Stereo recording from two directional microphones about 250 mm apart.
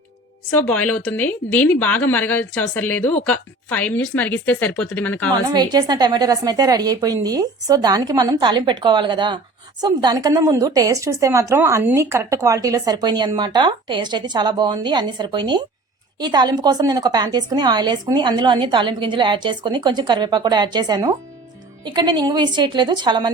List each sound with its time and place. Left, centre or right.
0.5 s a woman's voice: centre
5.5 s a woman's voice: centre